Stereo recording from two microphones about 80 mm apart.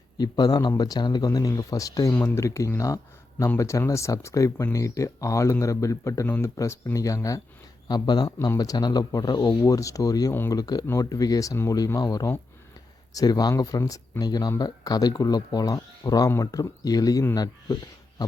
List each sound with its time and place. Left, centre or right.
0.2 s speech: left
6.2 s speech: left
6.9 s speech: left
7.9 s speech: left
8.4 s speech: left
18.2 s a sound: left